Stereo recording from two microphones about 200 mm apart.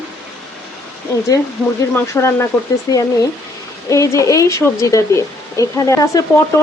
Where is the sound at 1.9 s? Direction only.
15° left (ahead or behind).